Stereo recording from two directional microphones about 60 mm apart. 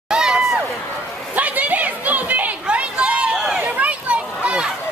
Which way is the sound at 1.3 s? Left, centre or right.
Right.